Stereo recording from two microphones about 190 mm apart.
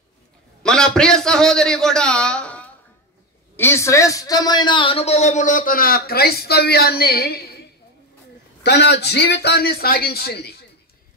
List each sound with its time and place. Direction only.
0.6 s a man's voice: 5° left (ahead or behind); by 7.6 s 55° left (ahead or behind)
8.6 s a man's voice: 60° left (ahead or behind)